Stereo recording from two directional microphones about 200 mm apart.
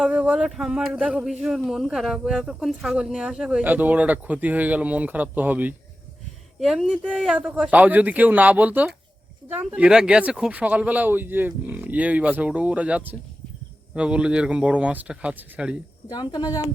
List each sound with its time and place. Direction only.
0.0 s speech: 5° right (ahead or behind)
16.0 s speech: 20° left (ahead or behind)